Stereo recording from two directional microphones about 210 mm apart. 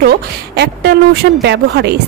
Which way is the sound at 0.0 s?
50° right (ahead or behind).